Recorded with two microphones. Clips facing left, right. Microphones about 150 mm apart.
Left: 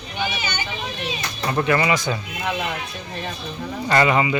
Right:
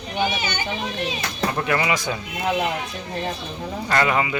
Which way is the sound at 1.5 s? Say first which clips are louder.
Left 5 dB; 5° right (ahead or behind).